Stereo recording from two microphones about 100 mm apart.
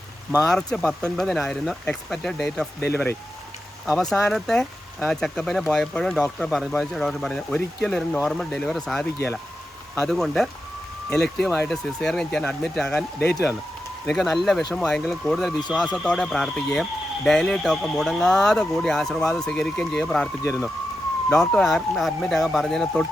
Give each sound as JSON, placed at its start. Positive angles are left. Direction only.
{"t": 0.4, "sound": "speech", "side_deg": 5}
{"t": 2.8, "sound": "speech", "side_deg": 20}
{"t": 3.8, "sound": "speech", "side_deg": 5}